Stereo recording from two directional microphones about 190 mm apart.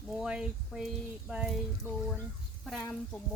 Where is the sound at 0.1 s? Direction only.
5° right (ahead or behind).